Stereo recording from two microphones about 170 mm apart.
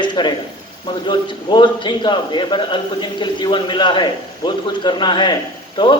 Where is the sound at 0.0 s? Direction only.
25° left (ahead or behind).